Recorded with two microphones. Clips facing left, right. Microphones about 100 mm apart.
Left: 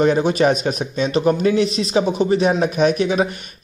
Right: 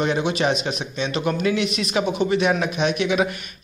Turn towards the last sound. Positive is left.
turn(degrees=35)  # may be behind; listen again after turning